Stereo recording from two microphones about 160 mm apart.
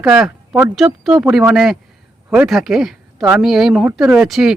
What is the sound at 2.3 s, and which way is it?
Speech, centre (ahead or behind).